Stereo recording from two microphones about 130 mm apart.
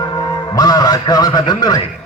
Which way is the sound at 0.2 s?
30° left (ahead or behind).